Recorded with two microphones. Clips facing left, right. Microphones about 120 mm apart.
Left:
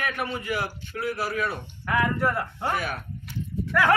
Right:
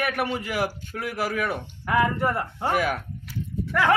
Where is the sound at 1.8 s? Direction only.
20° right (ahead or behind).